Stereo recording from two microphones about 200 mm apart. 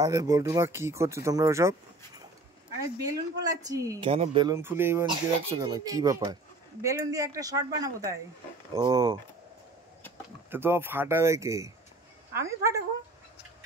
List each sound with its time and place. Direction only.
0.0 s speech: 15° right (ahead or behind)
4.0 s speech: 30° right (ahead or behind)
4.6 s speech: 10° right (ahead or behind)
10.5 s speech: 10° right (ahead or behind)